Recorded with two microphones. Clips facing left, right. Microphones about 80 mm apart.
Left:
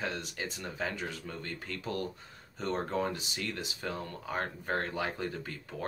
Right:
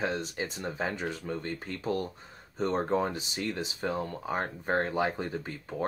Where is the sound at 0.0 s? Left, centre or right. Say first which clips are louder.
Right 5 dB; right.